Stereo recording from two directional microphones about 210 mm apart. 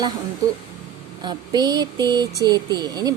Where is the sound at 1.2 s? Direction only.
20° right (ahead or behind).